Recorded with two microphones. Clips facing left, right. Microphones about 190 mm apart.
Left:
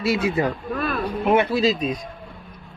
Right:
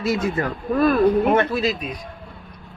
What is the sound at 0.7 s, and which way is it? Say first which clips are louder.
Speech: right 14 dB; 40° right (ahead or behind).